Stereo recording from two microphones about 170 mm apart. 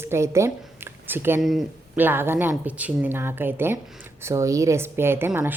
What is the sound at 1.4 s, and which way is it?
Speech, centre (ahead or behind).